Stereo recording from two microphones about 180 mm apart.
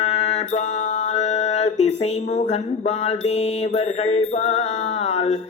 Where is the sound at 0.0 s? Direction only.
35° left (ahead or behind).